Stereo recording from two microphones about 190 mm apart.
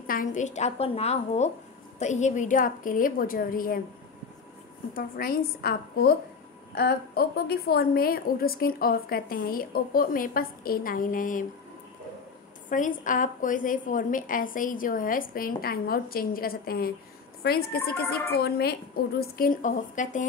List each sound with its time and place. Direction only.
0.0 s a woman's voice: 45° left (ahead or behind)
4.9 s a woman's voice: 50° left (ahead or behind)
12.6 s a woman's voice: 45° left (ahead or behind)